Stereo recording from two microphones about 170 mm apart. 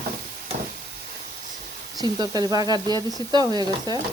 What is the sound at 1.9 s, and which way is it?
Speech, 25° right (ahead or behind).